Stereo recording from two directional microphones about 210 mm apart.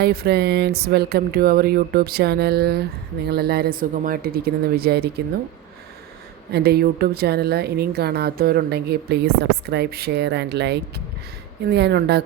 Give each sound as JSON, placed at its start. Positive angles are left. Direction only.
{"t": 0.0, "sound": "a woman's voice", "side_deg": -50}
{"t": 6.5, "sound": "a woman's voice", "side_deg": -50}